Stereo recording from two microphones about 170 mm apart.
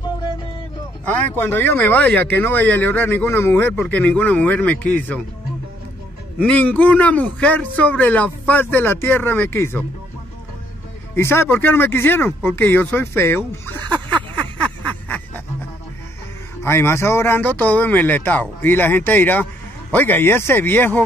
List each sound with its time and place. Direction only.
1.0 s speech: 10° left (ahead or behind)
6.4 s speech: 10° left (ahead or behind)
11.1 s speech: 15° left (ahead or behind)
14.6 s a sound: 10° left (ahead or behind)
16.6 s speech: 15° left (ahead or behind)